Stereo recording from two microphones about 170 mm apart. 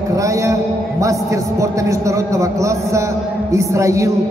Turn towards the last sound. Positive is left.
turn(degrees=-20)  # may be behind; listen again after turning